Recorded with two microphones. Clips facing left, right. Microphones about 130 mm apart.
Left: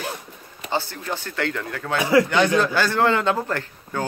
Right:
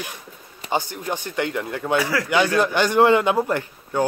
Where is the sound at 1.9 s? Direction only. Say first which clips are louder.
Left 5 dB; 20° left (ahead or behind).